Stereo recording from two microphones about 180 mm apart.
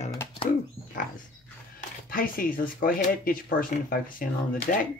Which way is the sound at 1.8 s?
50° left (ahead or behind).